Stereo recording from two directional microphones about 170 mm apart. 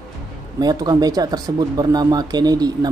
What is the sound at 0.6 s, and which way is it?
Speech, 25° right (ahead or behind).